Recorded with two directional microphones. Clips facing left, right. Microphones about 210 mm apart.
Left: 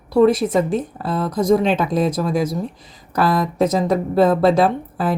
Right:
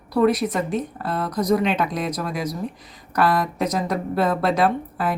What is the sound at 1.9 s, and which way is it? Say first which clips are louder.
Speech: left 7 dB; 30° left (ahead or behind).